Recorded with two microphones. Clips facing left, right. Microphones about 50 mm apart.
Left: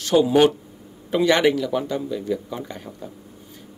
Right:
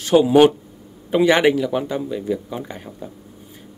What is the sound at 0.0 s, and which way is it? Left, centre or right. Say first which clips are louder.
Speech: right 3 dB; centre.